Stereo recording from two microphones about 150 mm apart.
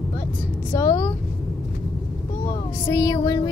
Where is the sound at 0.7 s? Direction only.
20° left (ahead or behind).